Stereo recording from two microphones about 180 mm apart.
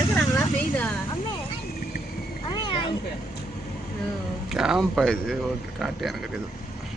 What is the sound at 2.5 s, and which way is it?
Cat, 25° left (ahead or behind).